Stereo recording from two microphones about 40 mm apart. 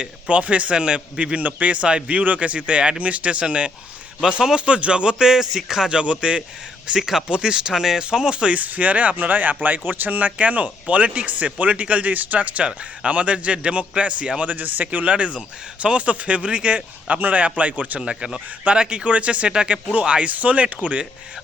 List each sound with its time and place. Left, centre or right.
0.0 s speech: right
1.4 s speech: right
4.2 s speech: centre
6.8 s speech: centre
8.5 s speech: right
14.4 s speech: right
14.9 s speech: right
18.0 s speech: centre